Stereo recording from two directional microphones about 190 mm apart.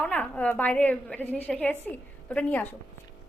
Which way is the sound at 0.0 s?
5° left (ahead or behind).